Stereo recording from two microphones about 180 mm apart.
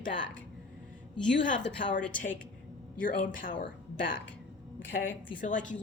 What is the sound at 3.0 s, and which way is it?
Speech, 50° left (ahead or behind).